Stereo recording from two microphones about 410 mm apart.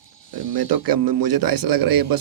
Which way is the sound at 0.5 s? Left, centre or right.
Right.